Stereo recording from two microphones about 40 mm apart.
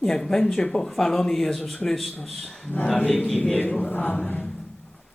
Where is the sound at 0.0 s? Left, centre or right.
Centre.